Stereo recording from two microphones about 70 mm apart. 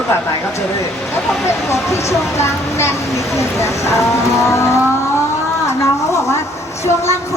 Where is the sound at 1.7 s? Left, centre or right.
Left.